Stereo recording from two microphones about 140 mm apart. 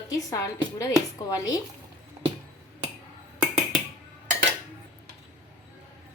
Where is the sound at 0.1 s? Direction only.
25° left (ahead or behind).